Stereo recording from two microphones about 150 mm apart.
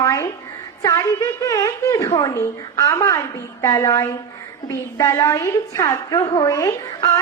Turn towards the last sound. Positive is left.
turn(degrees=25)  # may be behind; listen again after turning